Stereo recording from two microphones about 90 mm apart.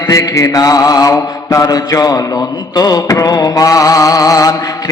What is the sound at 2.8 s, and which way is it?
Music, 40° left (ahead or behind).